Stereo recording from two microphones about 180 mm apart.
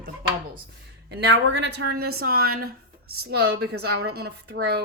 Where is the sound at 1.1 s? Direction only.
65° right (ahead or behind).